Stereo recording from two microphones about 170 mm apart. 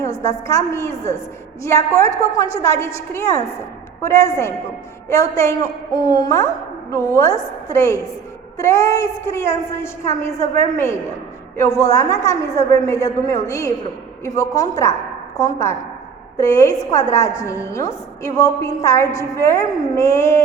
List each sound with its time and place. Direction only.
0.2 s a woman's voice: 15° left (ahead or behind)